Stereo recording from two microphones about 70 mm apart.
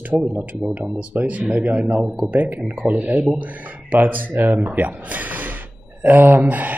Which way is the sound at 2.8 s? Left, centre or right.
Centre.